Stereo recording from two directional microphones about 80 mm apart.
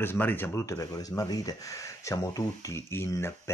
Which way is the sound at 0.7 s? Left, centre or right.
Left.